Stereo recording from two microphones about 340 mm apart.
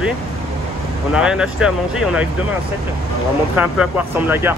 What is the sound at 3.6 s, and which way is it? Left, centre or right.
Speech, centre.